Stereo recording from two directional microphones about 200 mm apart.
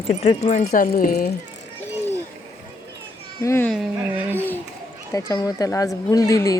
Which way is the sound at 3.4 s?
10° left (ahead or behind).